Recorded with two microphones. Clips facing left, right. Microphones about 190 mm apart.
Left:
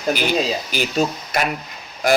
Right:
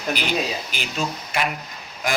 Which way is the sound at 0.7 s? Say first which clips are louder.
Left 7 dB; 40° left (ahead or behind).